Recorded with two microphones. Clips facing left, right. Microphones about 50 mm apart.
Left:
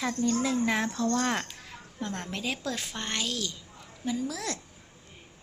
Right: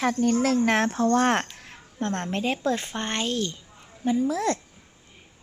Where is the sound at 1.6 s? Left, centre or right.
Right.